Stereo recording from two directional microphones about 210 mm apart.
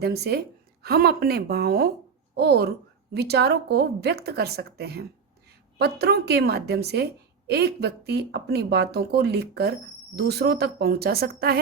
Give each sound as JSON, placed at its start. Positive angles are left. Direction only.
{"t": 0.0, "sound": "a woman's voice", "side_deg": -50}